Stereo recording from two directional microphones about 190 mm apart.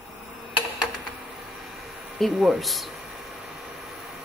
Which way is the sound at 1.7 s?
Centre (ahead or behind).